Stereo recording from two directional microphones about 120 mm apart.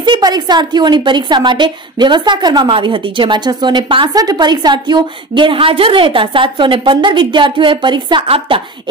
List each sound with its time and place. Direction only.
0.0 s a woman's voice: 35° right (ahead or behind)